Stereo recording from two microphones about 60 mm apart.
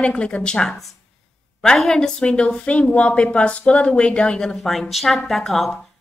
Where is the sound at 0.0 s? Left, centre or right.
Centre.